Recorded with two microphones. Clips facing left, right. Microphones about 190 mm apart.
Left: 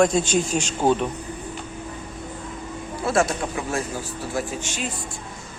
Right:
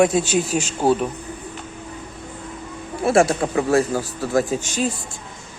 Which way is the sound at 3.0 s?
30° right (ahead or behind).